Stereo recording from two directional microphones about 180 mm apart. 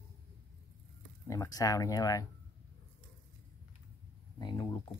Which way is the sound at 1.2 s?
15° left (ahead or behind).